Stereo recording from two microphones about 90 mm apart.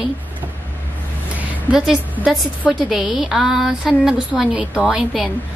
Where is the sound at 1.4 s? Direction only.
15° right (ahead or behind).